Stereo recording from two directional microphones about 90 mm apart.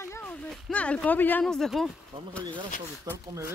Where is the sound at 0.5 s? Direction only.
10° left (ahead or behind).